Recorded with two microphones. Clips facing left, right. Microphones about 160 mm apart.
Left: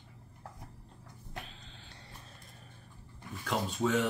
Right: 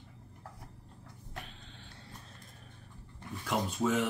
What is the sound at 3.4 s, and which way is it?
Speech, 5° right (ahead or behind).